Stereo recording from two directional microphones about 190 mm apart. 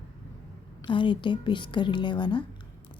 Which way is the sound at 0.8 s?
25° left (ahead or behind).